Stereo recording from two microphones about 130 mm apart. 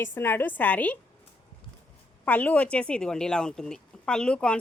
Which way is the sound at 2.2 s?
10° left (ahead or behind).